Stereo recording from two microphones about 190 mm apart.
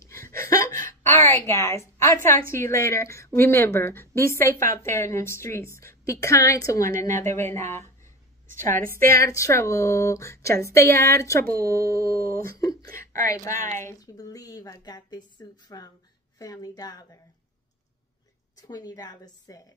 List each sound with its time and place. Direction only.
0.2 s a sound: 50° right (ahead or behind)
0.5 s a sound: 15° left (ahead or behind)
2.5 s a woman's voice: 15° left (ahead or behind)
8.5 s a woman's voice: 45° right (ahead or behind)
9.2 s a woman's voice: 15° left (ahead or behind)
11.4 s speech: 50° right (ahead or behind)
12.5 s a woman's voice: 20° left (ahead or behind)
18.6 s a woman's voice: 20° left (ahead or behind)